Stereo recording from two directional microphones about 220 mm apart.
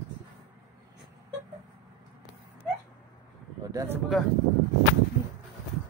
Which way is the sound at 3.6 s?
10° right (ahead or behind).